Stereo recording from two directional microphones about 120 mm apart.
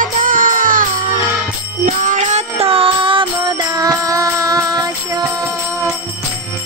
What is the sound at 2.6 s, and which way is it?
Music, 50° right (ahead or behind).